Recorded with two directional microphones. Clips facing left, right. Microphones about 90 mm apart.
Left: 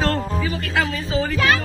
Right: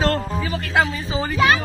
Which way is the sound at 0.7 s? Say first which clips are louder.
Right 4 dB; 20° right (ahead or behind).